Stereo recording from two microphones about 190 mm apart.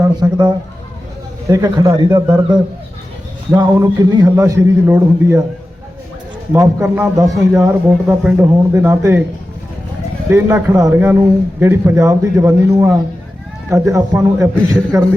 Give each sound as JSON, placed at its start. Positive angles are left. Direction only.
{"t": 0.0, "sound": "a man's voice", "side_deg": -20}
{"t": 6.5, "sound": "speech", "side_deg": -15}
{"t": 10.2, "sound": "speech", "side_deg": -15}